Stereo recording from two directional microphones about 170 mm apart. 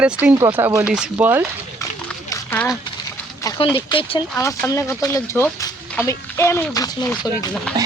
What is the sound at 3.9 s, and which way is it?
Speech, 30° left (ahead or behind).